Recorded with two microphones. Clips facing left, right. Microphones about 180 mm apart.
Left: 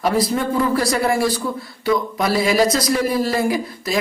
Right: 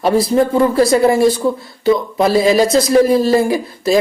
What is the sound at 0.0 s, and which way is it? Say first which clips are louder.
Speech: right 6 dB; 30° right (ahead or behind).